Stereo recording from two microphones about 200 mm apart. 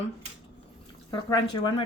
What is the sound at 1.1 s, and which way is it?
Speech, 20° left (ahead or behind).